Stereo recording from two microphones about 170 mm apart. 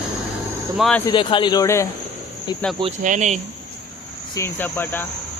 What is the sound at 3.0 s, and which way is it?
Speech, 45° right (ahead or behind).